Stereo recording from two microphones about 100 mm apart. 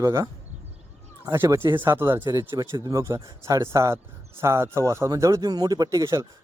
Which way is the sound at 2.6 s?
35° right (ahead or behind).